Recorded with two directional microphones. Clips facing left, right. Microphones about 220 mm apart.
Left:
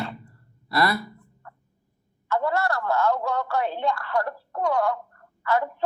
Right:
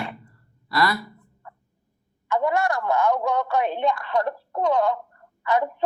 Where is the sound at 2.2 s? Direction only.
15° right (ahead or behind).